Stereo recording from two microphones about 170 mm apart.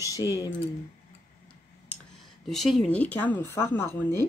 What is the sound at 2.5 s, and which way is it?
Speech, centre (ahead or behind).